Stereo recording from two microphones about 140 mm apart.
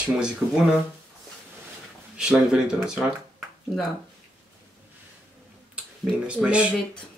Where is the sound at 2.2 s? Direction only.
5° right (ahead or behind).